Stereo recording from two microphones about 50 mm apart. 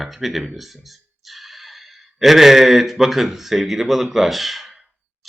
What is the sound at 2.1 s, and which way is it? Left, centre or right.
Speech, centre.